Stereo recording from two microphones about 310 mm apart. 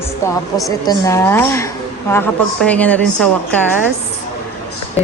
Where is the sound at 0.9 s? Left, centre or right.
Centre.